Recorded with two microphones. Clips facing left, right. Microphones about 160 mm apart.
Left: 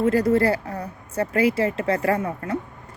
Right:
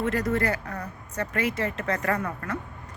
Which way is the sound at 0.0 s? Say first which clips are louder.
Left 7 dB; 30° left (ahead or behind).